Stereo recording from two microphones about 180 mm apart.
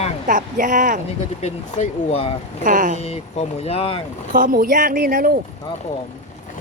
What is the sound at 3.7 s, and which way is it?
Speech, 35° left (ahead or behind).